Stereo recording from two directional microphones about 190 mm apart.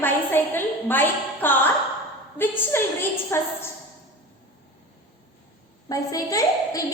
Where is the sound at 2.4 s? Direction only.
10° left (ahead or behind).